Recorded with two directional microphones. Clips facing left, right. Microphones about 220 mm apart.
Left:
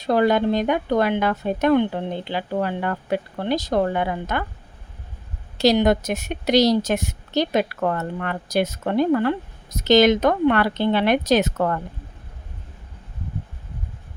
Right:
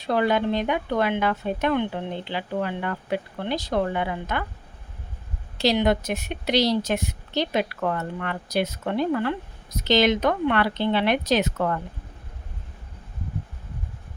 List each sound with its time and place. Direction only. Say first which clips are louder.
0.0 s speech: left 4 dB; 40° left (ahead or behind)
5.5 s a woman's voice: left 4 dB; 45° left (ahead or behind)